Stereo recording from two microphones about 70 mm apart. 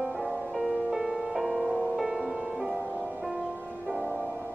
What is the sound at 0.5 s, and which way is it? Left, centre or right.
Music, centre.